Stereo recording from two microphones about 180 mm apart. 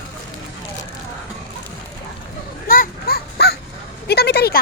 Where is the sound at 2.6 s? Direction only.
50° left (ahead or behind).